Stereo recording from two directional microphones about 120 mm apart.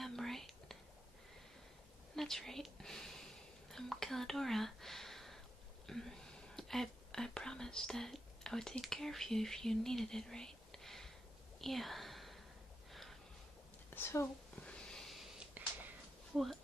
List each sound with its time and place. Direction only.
0.0 s whispering: centre (ahead or behind)
2.1 s speech: 5° left (ahead or behind)
11.6 s whispering: centre (ahead or behind)
13.8 s a woman's voice: 20° left (ahead or behind)
14.7 s a sound: 5° left (ahead or behind)